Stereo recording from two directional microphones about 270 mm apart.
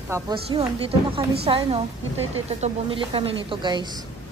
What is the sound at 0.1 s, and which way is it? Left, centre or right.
Speech, centre.